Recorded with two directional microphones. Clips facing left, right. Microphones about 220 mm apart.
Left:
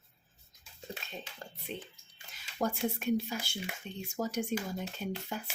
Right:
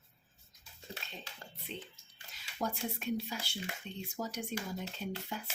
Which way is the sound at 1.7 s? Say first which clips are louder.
Left 3 dB; 50° left (ahead or behind).